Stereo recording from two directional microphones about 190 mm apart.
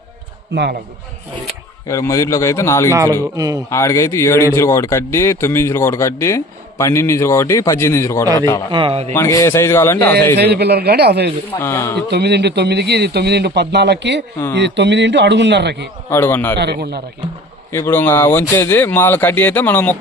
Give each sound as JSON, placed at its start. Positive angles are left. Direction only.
{"t": 0.5, "sound": "a man's voice", "side_deg": -60}
{"t": 1.9, "sound": "speech", "side_deg": 15}
{"t": 3.3, "sound": "a man's voice", "side_deg": -20}
{"t": 3.7, "sound": "speech", "side_deg": 15}
{"t": 8.7, "sound": "a man's voice", "side_deg": -30}
{"t": 9.1, "sound": "speech", "side_deg": 15}
{"t": 10.3, "sound": "a man's voice", "side_deg": -60}
{"t": 11.6, "sound": "speech", "side_deg": 15}
{"t": 12.1, "sound": "a man's voice", "side_deg": -60}
{"t": 16.0, "sound": "speech", "side_deg": 10}
{"t": 16.6, "sound": "a man's voice", "side_deg": -60}
{"t": 17.7, "sound": "speech", "side_deg": 10}